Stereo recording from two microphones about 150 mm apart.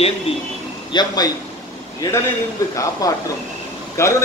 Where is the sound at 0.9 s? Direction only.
30° left (ahead or behind).